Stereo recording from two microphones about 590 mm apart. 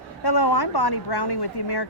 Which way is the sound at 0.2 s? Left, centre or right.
Left.